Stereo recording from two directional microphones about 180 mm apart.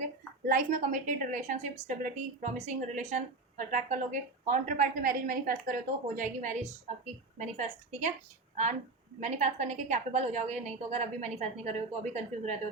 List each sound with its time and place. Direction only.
0.4 s a woman's voice: 50° right (ahead or behind)
9.2 s a woman's voice: 40° right (ahead or behind)